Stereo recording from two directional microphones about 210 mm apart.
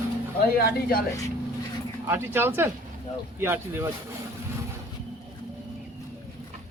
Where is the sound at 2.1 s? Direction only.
10° right (ahead or behind).